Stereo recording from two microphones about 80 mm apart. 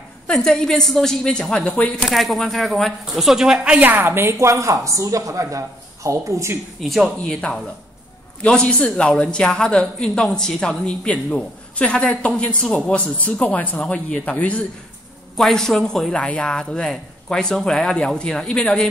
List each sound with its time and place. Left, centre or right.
0.3 s speech: centre
2.0 s a woman's voice: centre
3.9 s speech: right
6.8 s a woman's voice: centre
15.3 s speech: centre